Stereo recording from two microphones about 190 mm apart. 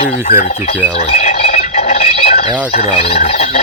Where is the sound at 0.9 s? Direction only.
35° left (ahead or behind).